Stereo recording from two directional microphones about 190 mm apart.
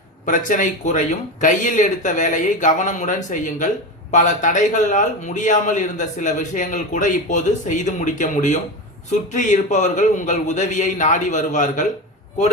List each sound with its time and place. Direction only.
0.3 s a man's voice: 45° left (ahead or behind)